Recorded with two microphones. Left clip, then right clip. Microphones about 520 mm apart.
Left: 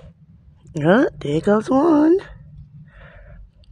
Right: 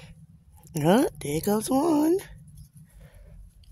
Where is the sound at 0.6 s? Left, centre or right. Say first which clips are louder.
Left 6 dB; right.